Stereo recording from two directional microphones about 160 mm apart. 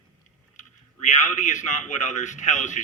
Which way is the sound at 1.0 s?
50° left (ahead or behind).